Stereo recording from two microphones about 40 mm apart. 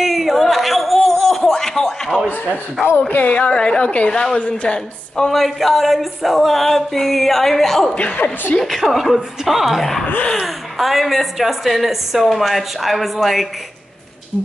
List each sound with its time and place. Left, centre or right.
0.0 s a sound: centre
2.4 s speech: left
3.3 s a woman's voice: left
3.8 s a woman's voice: left
4.1 s a woman's voice: centre
4.4 s a woman's voice: left
4.7 s a woman's voice: centre
5.3 s a sound: centre
8.2 s a woman's voice: left
8.5 s a sound: centre
9.8 s a woman's voice: centre
10.4 s a sound: centre